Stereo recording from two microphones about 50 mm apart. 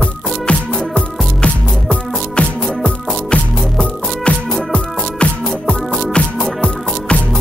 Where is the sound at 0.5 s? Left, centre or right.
Left.